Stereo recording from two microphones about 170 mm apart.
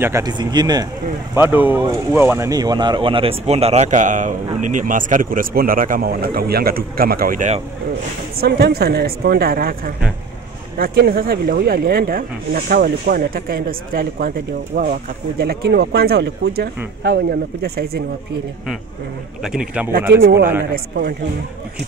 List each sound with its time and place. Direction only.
0.0 s speech: 20° right (ahead or behind)
1.3 s speech: 10° right (ahead or behind); by 7.6 s 45° right (ahead or behind)
8.4 s speech: 70° right (ahead or behind)
19.4 s a man's voice: 5° right (ahead or behind)